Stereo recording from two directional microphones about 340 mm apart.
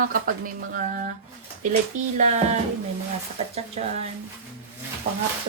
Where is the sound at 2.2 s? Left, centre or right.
Right.